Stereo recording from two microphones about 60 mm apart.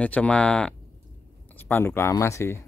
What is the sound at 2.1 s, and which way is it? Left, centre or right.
Speech, left.